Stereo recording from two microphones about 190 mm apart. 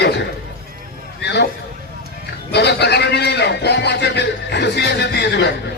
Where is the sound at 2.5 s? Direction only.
60° left (ahead or behind).